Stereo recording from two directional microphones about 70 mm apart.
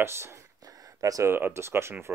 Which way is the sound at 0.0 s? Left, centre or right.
Right.